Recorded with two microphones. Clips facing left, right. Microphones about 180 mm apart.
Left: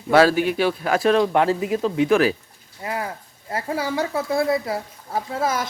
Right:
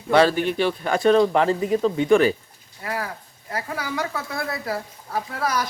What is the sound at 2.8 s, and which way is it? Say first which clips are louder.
Speech: left 1 dB; 20° left (ahead or behind).